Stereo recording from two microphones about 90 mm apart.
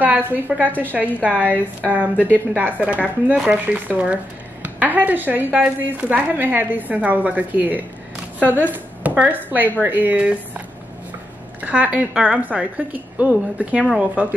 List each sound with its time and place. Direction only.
0.0 s a woman's voice: 20° right (ahead or behind)
11.6 s a woman's voice: 15° right (ahead or behind)